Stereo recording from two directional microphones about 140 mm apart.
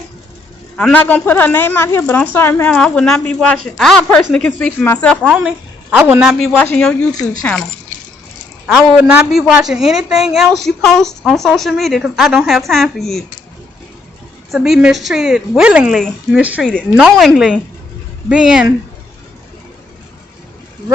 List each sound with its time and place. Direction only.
0.8 s a woman's voice: 10° left (ahead or behind)
5.2 s a woman's voice: 5° right (ahead or behind)
6.5 s a woman's voice: 10° left (ahead or behind)
8.6 s a woman's voice: 5° right (ahead or behind)
14.5 s a woman's voice: centre (ahead or behind)
16.4 s a woman's voice: 10° right (ahead or behind)
16.6 s a woman's voice: centre (ahead or behind)